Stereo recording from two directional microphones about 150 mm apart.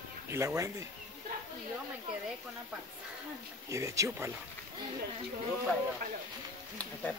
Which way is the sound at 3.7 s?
20° right (ahead or behind).